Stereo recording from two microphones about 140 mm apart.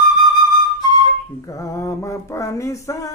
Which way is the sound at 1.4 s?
20° left (ahead or behind).